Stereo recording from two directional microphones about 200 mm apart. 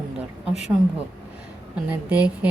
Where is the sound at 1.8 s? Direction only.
5° right (ahead or behind).